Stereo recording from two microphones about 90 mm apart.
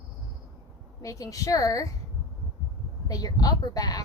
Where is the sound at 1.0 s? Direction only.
40° left (ahead or behind).